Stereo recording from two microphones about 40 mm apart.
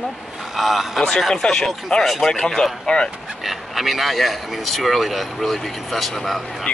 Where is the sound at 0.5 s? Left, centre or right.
Centre.